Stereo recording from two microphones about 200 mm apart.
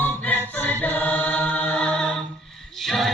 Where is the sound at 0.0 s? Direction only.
10° left (ahead or behind).